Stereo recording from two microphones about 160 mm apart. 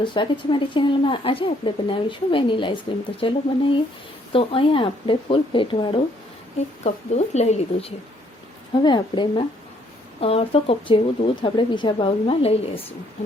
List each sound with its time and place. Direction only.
0.0 s a woman's voice: 30° left (ahead or behind)
6.8 s speech: 45° left (ahead or behind)
8.7 s a woman's voice: 30° left (ahead or behind)